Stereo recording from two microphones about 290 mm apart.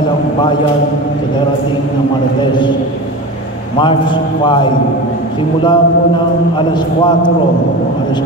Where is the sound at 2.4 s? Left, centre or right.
Centre.